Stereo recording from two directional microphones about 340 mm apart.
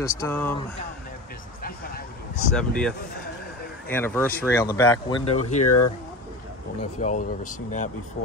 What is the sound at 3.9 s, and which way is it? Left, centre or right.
Speech, centre.